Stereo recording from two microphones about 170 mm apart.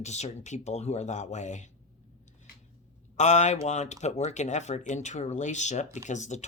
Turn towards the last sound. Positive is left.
turn(degrees=45)  # may be behind; listen again after turning